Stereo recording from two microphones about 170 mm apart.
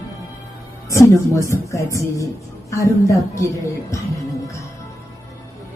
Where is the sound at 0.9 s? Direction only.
20° left (ahead or behind).